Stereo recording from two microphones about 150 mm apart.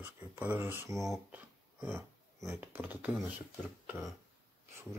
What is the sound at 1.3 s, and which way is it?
Dog, 15° right (ahead or behind).